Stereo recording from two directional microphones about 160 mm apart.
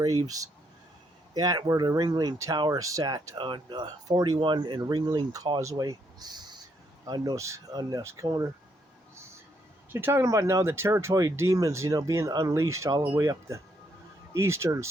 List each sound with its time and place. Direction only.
0.0 s speech: 20° right (ahead or behind)
9.9 s speech: 15° right (ahead or behind)